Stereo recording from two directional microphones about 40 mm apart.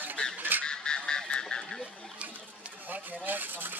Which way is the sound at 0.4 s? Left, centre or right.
Right.